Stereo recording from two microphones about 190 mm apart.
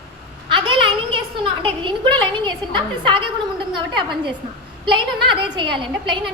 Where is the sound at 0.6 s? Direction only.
25° right (ahead or behind).